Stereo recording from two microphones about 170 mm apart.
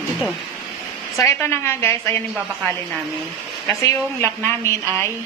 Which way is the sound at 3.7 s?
15° left (ahead or behind).